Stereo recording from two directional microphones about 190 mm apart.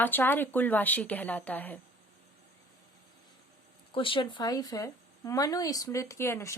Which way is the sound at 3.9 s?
25° left (ahead or behind).